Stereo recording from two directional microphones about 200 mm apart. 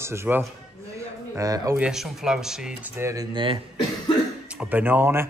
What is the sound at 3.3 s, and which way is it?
Speech, 25° right (ahead or behind).